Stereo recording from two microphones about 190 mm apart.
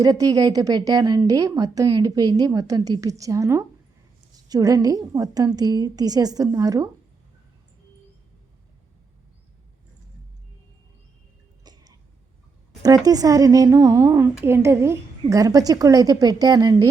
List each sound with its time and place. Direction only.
0.0 s a woman's voice: 20° right (ahead or behind)
11.6 s throat clearing: 20° right (ahead or behind)
13.1 s a woman's voice: 20° right (ahead or behind)